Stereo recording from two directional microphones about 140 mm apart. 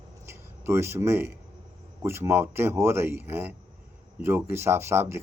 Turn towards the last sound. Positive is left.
turn(degrees=-20)  # may be behind; listen again after turning